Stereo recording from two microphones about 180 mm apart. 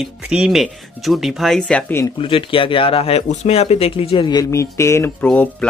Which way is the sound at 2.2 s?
30° left (ahead or behind).